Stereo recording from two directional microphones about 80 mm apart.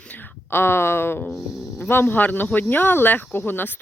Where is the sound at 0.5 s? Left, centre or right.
Left.